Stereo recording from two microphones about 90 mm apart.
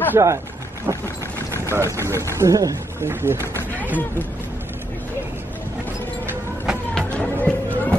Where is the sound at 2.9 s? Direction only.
25° right (ahead or behind).